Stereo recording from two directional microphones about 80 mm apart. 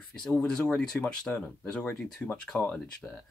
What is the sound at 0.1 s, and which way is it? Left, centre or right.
Speech, centre.